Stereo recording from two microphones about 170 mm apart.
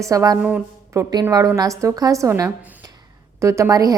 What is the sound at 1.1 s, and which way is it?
A woman's voice, 20° right (ahead or behind).